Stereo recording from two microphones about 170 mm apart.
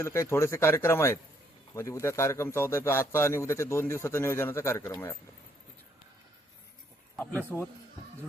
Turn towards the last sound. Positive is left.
turn(degrees=-5)  # may be behind; listen again after turning